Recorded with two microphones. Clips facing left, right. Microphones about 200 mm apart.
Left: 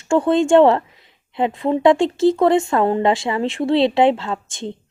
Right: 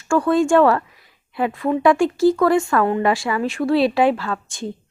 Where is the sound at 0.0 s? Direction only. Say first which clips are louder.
Left 1 dB; 25° left (ahead or behind).